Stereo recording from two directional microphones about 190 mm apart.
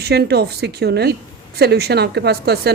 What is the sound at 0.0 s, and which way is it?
A woman's voice, 60° right (ahead or behind).